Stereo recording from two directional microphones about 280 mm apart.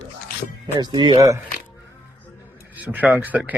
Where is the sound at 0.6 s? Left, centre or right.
Centre.